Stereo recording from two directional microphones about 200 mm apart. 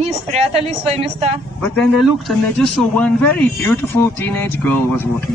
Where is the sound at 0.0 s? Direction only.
35° right (ahead or behind).